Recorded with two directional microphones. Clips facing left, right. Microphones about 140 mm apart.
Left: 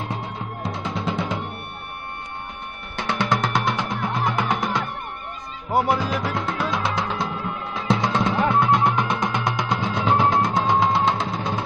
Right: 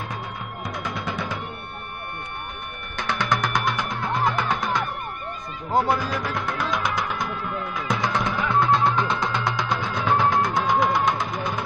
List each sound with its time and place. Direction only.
0.1 s music: 25° left (ahead or behind)
3.0 s music: 25° left (ahead or behind)
5.7 s music: 20° left (ahead or behind)